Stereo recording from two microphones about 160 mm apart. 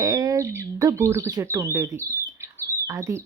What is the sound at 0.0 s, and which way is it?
Speech, 20° right (ahead or behind).